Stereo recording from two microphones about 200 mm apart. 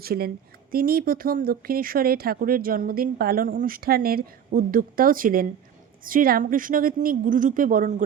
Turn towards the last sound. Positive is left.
turn(degrees=-45)  # may be behind; listen again after turning